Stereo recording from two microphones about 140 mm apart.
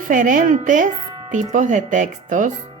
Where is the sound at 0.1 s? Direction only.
70° right (ahead or behind).